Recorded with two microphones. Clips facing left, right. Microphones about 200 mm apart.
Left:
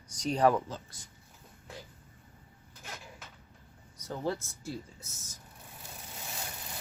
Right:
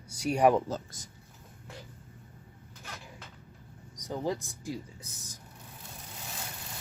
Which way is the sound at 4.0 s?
15° right (ahead or behind).